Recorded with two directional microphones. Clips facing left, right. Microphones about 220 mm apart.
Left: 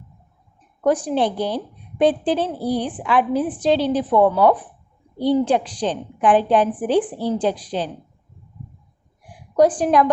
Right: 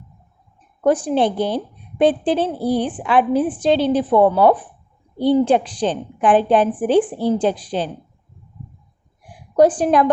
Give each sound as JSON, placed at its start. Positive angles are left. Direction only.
{"t": 0.9, "sound": "a woman's voice", "side_deg": -25}
{"t": 9.6, "sound": "a woman's voice", "side_deg": -30}